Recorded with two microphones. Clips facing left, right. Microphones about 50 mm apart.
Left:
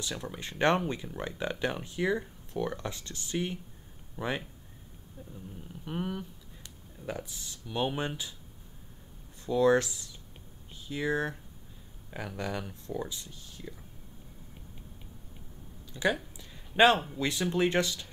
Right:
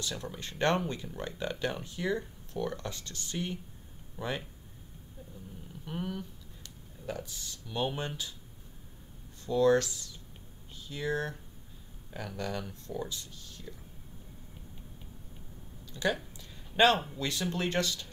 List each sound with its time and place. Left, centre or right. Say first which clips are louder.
0.1 s speech: left 1 dB; centre
4.2 s speech: left 2 dB; left
5.9 s speech: left 2 dB; centre
9.5 s speech: left 1 dB; centre
15.8 s a sound: left 2 dB; centre
17.2 s speech: left 5 dB; centre